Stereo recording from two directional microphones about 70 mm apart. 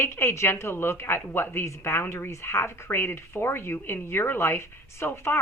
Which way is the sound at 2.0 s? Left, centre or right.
Left.